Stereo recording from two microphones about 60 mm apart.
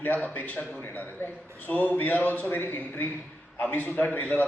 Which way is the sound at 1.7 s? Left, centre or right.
Left.